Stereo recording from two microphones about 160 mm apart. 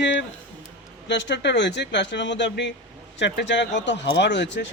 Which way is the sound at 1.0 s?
90° left.